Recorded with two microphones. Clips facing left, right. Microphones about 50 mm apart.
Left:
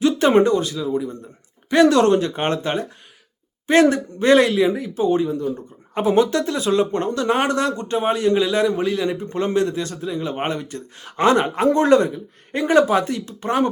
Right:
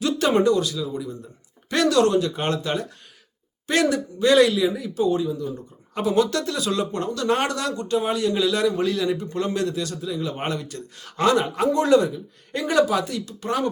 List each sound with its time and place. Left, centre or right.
0.0 s speech: left
1.7 s speech: left
12.5 s speech: left